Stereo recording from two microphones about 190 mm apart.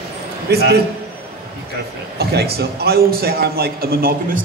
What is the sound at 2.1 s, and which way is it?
A man's voice, 55° right (ahead or behind).